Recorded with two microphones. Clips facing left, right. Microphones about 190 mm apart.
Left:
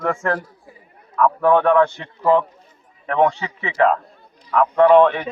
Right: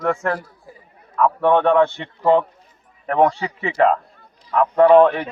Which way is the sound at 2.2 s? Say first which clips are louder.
Right 1 dB; 30° right (ahead or behind).